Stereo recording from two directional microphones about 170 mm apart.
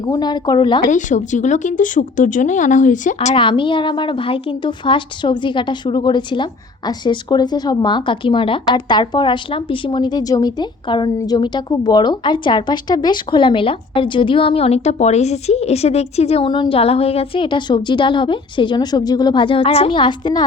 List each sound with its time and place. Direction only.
0.0 s a woman's voice: 25° left (ahead or behind)
0.9 s speech: 45° left (ahead or behind)
3.2 s a woman's voice: 30° left (ahead or behind)